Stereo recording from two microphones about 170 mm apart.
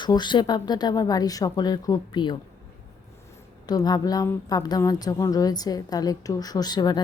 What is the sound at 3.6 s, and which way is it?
A woman's voice, 20° left (ahead or behind).